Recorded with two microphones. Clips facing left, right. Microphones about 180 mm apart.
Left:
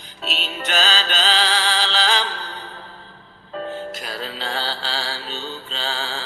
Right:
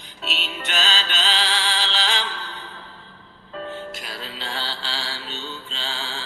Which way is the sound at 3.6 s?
40° left (ahead or behind).